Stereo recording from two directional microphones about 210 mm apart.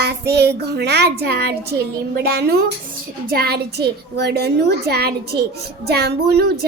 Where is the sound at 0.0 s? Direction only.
50° right (ahead or behind).